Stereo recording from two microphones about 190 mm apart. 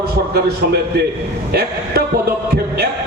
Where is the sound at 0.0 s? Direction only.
55° right (ahead or behind).